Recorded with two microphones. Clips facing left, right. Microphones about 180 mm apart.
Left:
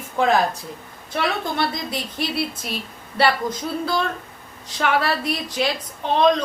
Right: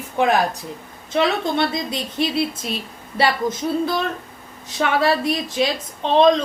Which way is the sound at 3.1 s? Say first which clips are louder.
Even; 20° right (ahead or behind).